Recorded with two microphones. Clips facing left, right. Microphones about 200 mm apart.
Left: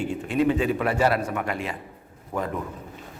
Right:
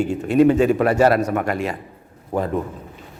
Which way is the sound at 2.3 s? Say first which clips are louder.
Right 6 dB; 30° right (ahead or behind).